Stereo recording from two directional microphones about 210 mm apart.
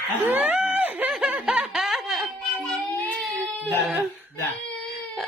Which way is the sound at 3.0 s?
5° left (ahead or behind).